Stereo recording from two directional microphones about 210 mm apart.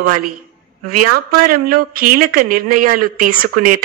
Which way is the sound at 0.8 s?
45° right (ahead or behind).